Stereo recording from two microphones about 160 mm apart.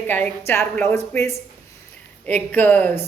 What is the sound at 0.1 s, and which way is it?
Speech, 10° left (ahead or behind).